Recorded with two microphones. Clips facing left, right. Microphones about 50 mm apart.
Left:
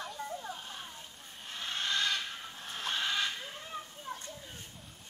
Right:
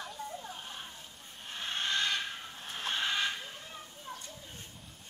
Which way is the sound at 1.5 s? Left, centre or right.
Right.